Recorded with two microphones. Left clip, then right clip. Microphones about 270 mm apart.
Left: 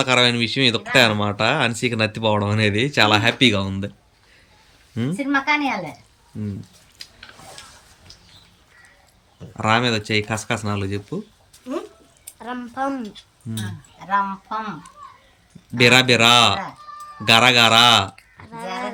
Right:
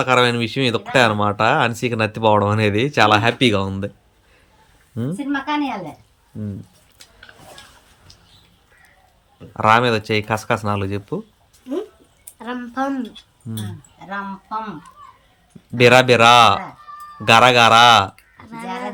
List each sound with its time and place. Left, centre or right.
0.0 s speech: centre
5.1 s speech: centre
9.6 s speech: centre
12.4 s speech: left
15.7 s speech: centre
18.4 s a sound: left